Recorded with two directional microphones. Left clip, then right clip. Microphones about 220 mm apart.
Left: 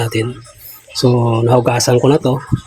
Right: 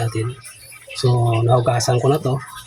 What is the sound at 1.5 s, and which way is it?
Speech, 40° left (ahead or behind).